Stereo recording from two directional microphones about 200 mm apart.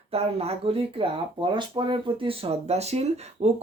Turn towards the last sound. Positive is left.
turn(degrees=-30)  # may be behind; listen again after turning